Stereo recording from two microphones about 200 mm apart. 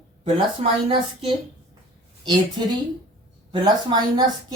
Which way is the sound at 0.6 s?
25° right (ahead or behind).